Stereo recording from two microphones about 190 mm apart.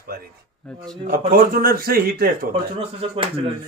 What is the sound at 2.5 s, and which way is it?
Speech, 30° right (ahead or behind).